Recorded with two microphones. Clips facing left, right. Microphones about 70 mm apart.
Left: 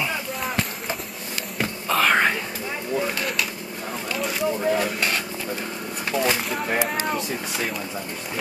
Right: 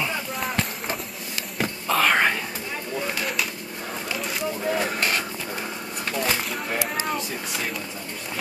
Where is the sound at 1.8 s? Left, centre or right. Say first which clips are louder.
Left 1 dB; centre.